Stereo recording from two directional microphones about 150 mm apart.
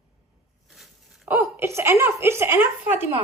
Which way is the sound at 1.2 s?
15° right (ahead or behind).